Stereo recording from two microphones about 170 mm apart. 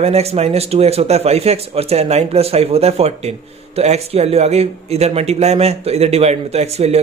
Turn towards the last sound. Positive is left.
turn(degrees=-40)  # may be behind; listen again after turning